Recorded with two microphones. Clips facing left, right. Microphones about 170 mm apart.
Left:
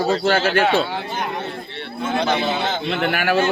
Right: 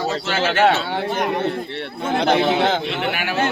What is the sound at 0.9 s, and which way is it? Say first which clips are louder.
A man's voice: right 4 dB; 65° right (ahead or behind).